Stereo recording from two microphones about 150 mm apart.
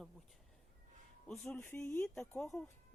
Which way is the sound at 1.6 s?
15° left (ahead or behind).